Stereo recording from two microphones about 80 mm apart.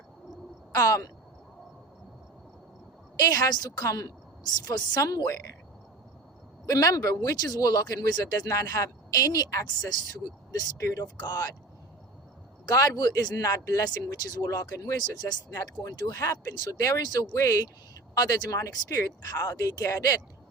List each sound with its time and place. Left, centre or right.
0.7 s speech: left
3.2 s speech: left
3.8 s speech: left
6.7 s speech: left
11.0 s speech: left
12.6 s speech: left
15.4 s speech: left